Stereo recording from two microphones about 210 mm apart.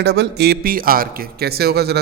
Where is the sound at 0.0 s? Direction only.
55° right (ahead or behind).